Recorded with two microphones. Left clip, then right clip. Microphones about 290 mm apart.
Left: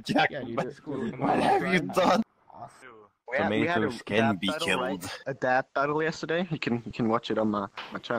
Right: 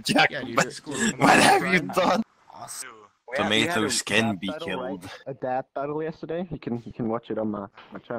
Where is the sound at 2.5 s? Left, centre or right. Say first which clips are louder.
Right 5 dB; right.